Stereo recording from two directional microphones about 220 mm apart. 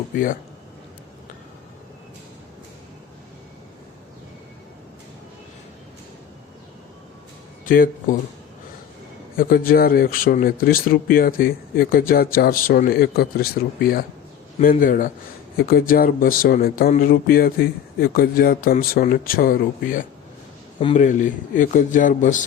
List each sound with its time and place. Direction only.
7.6 s speech: 40° left (ahead or behind)
9.3 s speech: 40° left (ahead or behind)